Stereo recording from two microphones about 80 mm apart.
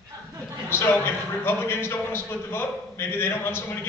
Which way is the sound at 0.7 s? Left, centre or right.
Left.